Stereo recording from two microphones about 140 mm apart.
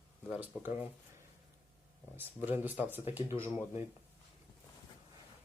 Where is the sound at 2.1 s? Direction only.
15° right (ahead or behind).